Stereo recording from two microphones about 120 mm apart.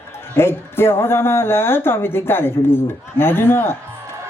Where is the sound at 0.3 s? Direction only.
20° left (ahead or behind).